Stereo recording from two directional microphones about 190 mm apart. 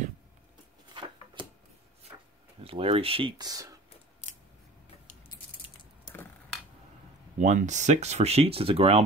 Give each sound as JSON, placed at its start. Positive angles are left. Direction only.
{"t": 0.9, "sound": "a sound", "side_deg": -25}
{"t": 2.6, "sound": "speech", "side_deg": -30}
{"t": 7.3, "sound": "speech", "side_deg": -40}